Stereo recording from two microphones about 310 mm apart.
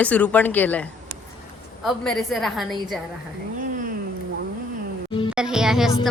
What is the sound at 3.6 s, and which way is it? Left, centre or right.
Cat, right.